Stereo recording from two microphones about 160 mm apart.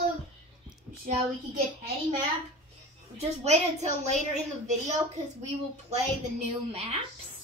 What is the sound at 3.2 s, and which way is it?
A woman's voice, 40° right (ahead or behind).